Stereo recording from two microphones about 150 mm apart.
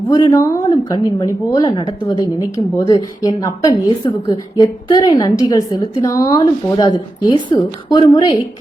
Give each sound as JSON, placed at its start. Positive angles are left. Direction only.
{"t": 0.1, "sound": "a woman's voice", "side_deg": 25}